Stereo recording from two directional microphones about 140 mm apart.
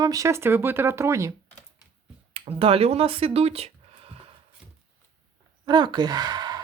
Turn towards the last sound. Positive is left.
turn(degrees=-30)  # may be behind; listen again after turning